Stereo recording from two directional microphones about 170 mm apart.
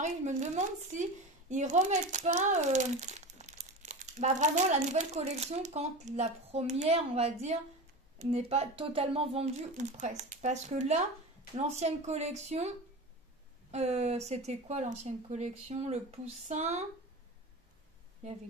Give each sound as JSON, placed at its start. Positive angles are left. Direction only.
{"t": 0.0, "sound": "speech", "side_deg": -45}